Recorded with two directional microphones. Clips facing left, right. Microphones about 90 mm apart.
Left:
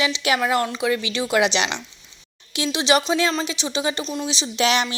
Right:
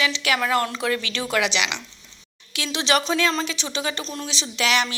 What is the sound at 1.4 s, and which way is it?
Speech, 30° left (ahead or behind).